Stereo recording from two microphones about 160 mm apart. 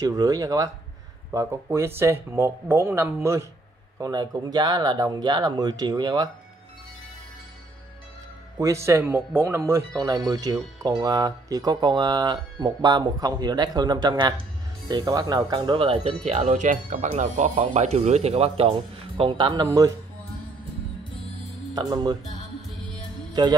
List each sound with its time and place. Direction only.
0.0 s speech: 20° right (ahead or behind)
8.5 s speech: 20° right (ahead or behind)
21.7 s speech: 25° right (ahead or behind)
23.4 s speech: 25° right (ahead or behind)